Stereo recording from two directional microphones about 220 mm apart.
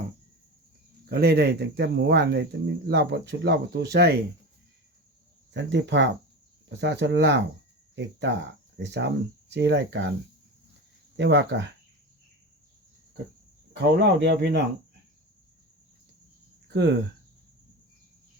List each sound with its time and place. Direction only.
1.1 s speech: 45° right (ahead or behind)
5.5 s speech: 55° right (ahead or behind)
11.2 s speech: 55° right (ahead or behind)
13.7 s speech: 50° right (ahead or behind)
16.6 s speech: 50° right (ahead or behind)